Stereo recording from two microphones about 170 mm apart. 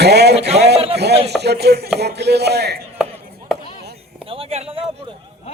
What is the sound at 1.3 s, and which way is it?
A man's voice, 75° right (ahead or behind).